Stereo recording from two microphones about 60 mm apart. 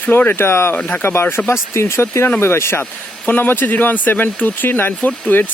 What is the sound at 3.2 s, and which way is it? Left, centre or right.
Speech, left.